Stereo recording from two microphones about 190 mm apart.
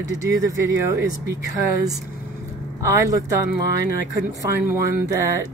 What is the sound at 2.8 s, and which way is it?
Speech, 15° right (ahead or behind).